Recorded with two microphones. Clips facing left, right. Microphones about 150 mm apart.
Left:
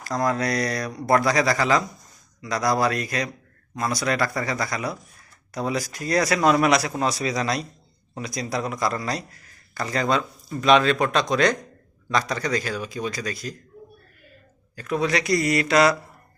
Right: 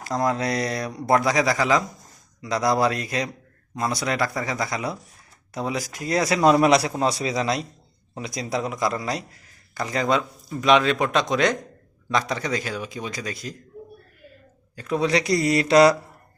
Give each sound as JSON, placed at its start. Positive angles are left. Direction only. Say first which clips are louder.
{"t": 0.2, "sound": "a man's voice", "louder": "even", "side_deg": -20}
{"t": 2.4, "sound": "a man's voice", "louder": "right 1 dB", "side_deg": -25}
{"t": 14.8, "sound": "speech", "louder": "right 1 dB", "side_deg": -25}